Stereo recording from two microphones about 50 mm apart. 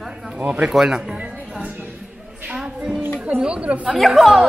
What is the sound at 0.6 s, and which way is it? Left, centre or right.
Speech, centre.